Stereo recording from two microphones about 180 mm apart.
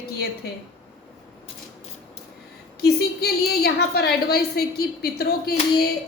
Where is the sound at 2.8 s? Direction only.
65° left (ahead or behind).